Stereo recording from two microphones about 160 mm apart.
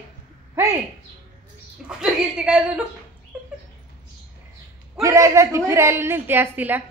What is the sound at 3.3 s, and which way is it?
Dog, 10° right (ahead or behind).